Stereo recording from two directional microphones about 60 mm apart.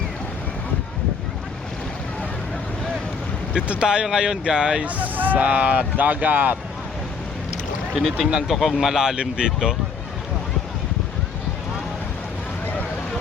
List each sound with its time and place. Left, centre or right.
3.5 s speech: centre
8.3 s speech: centre